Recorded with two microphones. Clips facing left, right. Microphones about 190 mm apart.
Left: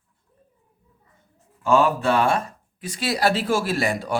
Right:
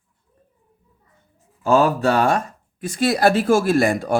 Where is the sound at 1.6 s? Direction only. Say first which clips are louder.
Right 2 dB; 40° right (ahead or behind).